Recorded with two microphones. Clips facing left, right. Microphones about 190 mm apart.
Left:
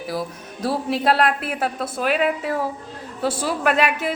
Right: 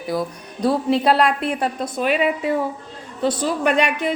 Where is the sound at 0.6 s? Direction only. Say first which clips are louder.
Right 4 dB; 5° left (ahead or behind).